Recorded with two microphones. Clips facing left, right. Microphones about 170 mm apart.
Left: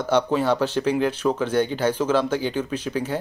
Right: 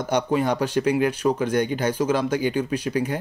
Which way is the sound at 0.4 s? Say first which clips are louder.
Left 1 dB; 45° right (ahead or behind).